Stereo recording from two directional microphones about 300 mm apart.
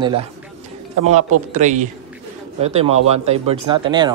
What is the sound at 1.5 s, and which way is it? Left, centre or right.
A man's voice, right.